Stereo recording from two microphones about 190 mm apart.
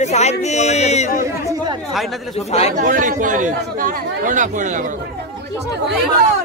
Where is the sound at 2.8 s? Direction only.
45° right (ahead or behind).